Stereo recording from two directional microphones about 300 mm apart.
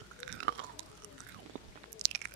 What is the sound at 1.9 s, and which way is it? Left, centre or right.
Chewing, right.